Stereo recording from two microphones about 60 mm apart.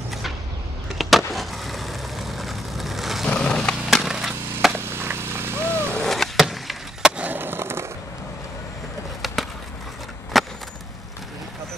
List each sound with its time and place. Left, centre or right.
0.9 s skateboard: centre
3.3 s skateboard: centre
4.1 s wood: centre
4.7 s a sound: right
5.9 s vehicle: centre
7.0 s skateboard: centre
7.2 s skateboard: right
9.2 s a sound: centre